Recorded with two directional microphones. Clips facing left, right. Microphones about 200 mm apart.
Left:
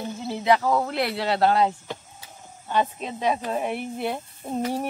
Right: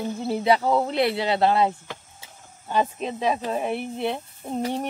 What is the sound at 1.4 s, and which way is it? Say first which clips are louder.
Speech: left 1 dB; 5° right (ahead or behind).